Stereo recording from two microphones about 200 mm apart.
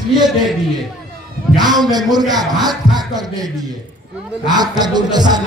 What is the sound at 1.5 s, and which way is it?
A man's voice, 20° right (ahead or behind).